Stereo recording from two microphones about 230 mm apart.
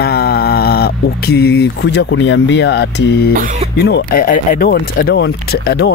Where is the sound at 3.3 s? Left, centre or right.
Right.